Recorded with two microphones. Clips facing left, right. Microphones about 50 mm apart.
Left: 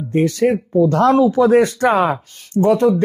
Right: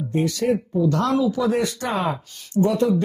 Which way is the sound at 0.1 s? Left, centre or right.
Left.